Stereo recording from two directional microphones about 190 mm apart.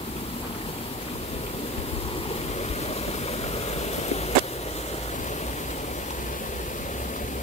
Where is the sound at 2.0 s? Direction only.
30° left (ahead or behind).